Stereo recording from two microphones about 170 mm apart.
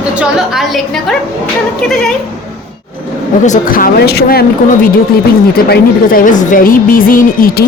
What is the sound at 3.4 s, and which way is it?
A woman's voice, 50° left (ahead or behind).